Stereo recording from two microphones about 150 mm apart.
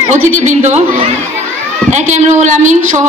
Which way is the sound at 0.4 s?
55° right (ahead or behind).